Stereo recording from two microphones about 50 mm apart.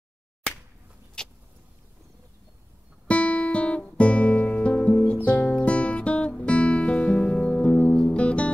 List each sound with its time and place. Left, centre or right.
1.2 s vehicle: centre
3.1 s music: left